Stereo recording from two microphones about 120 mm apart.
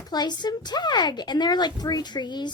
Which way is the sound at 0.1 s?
35° left (ahead or behind).